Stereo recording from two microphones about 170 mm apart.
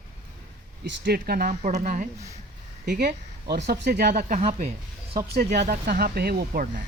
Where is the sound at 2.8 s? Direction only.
60° right (ahead or behind).